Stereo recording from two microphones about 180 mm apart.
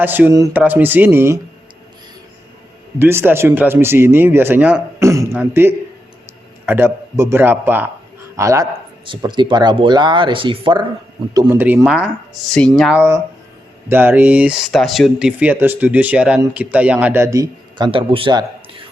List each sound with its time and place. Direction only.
0.0 s speech: 10° right (ahead or behind)
3.0 s speech: 15° right (ahead or behind); by 10.8 s 30° right (ahead or behind)
11.3 s speech: 10° right (ahead or behind)
13.0 s speech: 15° right (ahead or behind)